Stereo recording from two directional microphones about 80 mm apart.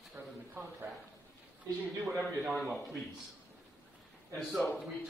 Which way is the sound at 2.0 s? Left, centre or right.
Centre.